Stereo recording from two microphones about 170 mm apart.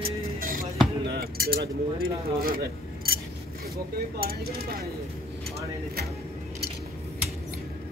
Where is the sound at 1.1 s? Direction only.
65° right (ahead or behind).